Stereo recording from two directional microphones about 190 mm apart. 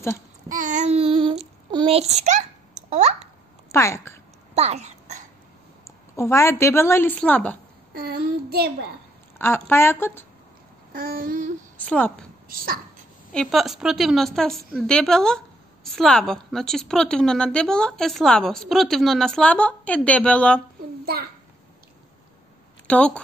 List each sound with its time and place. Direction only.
0.5 s child singing: 40° right (ahead or behind)
3.7 s a woman's voice: 15° left (ahead or behind)
4.6 s babbling: 35° right (ahead or behind)
6.1 s a woman's voice: 15° left (ahead or behind)
7.9 s child singing: 50° right (ahead or behind)
9.4 s a woman's voice: 10° left (ahead or behind)
10.9 s babbling: 50° right (ahead or behind)
11.8 s a woman's voice: 5° left (ahead or behind)
12.4 s speech: 50° right (ahead or behind)
13.3 s a woman's voice: centre (ahead or behind)
21.0 s a child's voice: 50° right (ahead or behind)
22.8 s a woman's voice: 5° left (ahead or behind)